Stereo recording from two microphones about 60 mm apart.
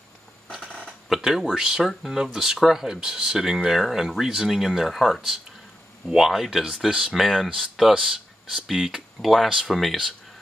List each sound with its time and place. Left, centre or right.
0.5 s speech: centre